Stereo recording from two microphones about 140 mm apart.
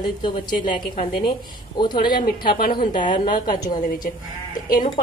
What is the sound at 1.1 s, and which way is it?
Speech, 35° left (ahead or behind).